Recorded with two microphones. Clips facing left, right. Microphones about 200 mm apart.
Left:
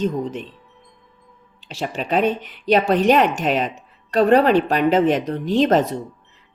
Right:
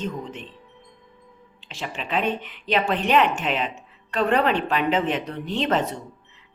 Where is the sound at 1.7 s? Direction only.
40° left (ahead or behind).